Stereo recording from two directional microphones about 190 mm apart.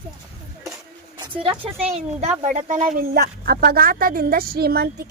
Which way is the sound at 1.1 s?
25° right (ahead or behind).